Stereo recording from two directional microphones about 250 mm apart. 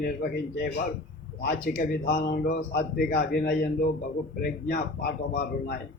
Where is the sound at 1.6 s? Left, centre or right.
Left.